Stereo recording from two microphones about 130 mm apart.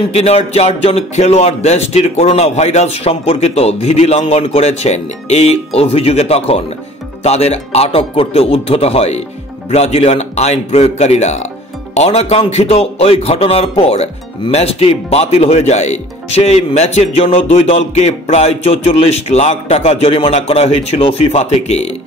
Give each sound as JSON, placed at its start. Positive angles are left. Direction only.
{"t": 0.1, "sound": "a man's voice", "side_deg": 55}